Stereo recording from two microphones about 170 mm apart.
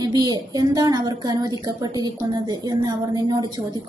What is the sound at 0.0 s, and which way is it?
Speech, 25° right (ahead or behind).